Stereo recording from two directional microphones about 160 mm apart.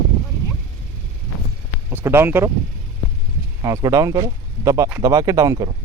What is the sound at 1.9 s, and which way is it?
Speech, 15° right (ahead or behind).